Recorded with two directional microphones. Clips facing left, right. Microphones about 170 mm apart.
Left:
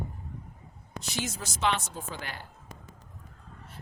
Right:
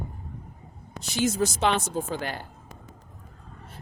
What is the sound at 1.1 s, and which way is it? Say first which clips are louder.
Speech: right 11 dB; 40° right (ahead or behind).